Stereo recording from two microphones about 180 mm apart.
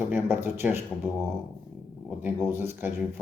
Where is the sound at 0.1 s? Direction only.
10° right (ahead or behind).